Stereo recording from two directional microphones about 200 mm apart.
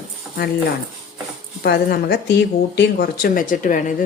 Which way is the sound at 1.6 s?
50° left (ahead or behind).